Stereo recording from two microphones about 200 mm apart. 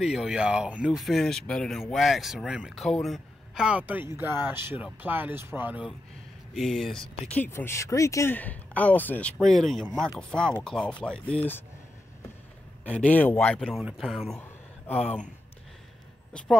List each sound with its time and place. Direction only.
0.0 s speech: 5° right (ahead or behind)
12.8 s speech: 5° left (ahead or behind)
15.0 s speech: 35° left (ahead or behind)
16.3 s speech: 5° left (ahead or behind)